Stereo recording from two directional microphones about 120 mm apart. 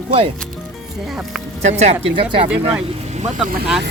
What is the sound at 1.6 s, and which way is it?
Speech, 70° right (ahead or behind).